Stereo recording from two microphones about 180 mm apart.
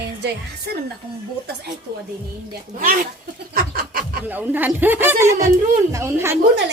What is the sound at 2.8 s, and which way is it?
Speech, 50° right (ahead or behind).